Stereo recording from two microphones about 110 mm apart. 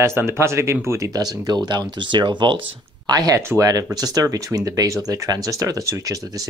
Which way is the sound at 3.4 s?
30° right (ahead or behind).